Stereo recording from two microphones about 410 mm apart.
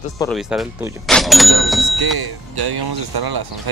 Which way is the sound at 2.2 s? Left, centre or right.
Right.